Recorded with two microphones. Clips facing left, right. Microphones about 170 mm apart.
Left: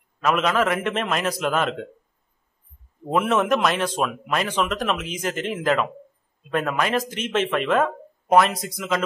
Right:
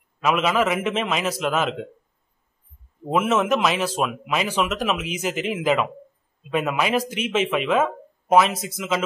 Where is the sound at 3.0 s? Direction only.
5° right (ahead or behind).